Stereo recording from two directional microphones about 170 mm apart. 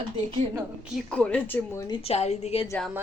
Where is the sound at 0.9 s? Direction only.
5° left (ahead or behind); by 2.6 s 40° left (ahead or behind).